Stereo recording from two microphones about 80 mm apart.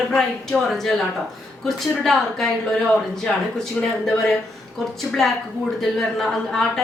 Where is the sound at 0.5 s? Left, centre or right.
Left.